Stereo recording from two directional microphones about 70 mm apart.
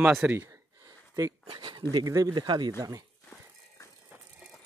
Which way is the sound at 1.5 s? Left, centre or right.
Right.